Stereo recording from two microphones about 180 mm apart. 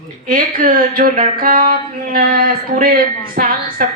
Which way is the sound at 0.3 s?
50° right (ahead or behind).